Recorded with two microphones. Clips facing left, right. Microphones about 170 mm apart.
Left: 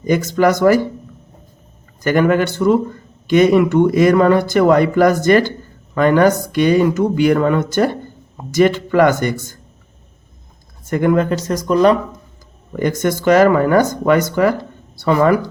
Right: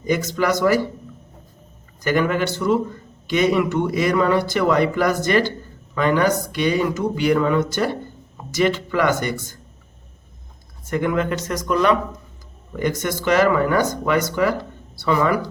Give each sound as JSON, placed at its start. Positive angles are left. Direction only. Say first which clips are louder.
{"t": 0.0, "sound": "speech", "louder": "left 6 dB", "side_deg": 50}
{"t": 2.0, "sound": "speech", "louder": "left 5 dB", "side_deg": 50}
{"t": 10.8, "sound": "speech", "louder": "left 6 dB", "side_deg": 45}
{"t": 12.7, "sound": "speech", "louder": "left 5 dB", "side_deg": 50}